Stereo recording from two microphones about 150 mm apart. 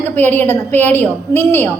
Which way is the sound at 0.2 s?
15° left (ahead or behind).